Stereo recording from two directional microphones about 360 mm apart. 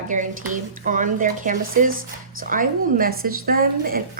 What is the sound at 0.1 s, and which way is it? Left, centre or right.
Speech, right.